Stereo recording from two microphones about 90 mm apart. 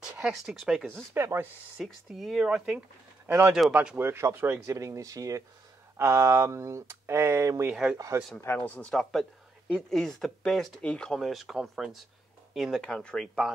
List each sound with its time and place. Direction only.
0.3 s speech: centre (ahead or behind)
1.1 s speech: 30° right (ahead or behind)
1.8 s speech: 5° right (ahead or behind)
3.3 s speech: 30° right (ahead or behind)
7.7 s speech: 10° right (ahead or behind)
8.5 s speech: 15° left (ahead or behind); by 12.8 s centre (ahead or behind)
12.8 s speech: 10° left (ahead or behind)